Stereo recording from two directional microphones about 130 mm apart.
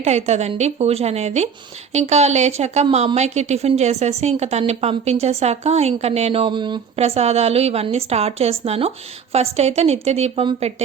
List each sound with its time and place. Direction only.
0.0 s a woman's voice: 60° right (ahead or behind); by 6.7 s 35° right (ahead or behind)
6.9 s a woman's voice: 50° right (ahead or behind)